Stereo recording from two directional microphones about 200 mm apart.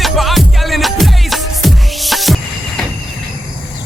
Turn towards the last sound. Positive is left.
turn(degrees=0)  # may be behind; listen again after turning